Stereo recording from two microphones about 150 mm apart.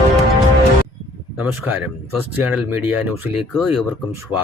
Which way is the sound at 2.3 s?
10° right (ahead or behind).